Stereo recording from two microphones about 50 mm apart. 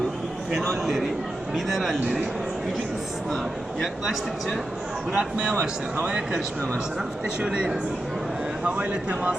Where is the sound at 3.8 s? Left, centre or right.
Centre.